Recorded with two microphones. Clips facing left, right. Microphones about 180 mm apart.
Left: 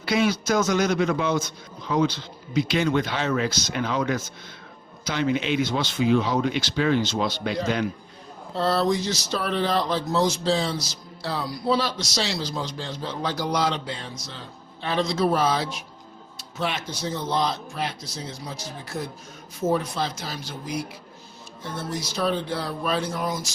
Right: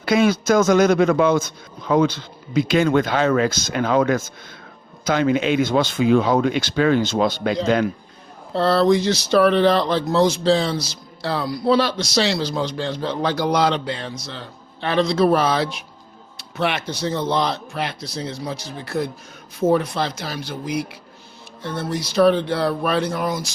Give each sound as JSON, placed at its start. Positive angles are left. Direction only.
{"t": 0.0, "sound": "a man's voice", "side_deg": -50}
{"t": 8.5, "sound": "speech", "side_deg": -70}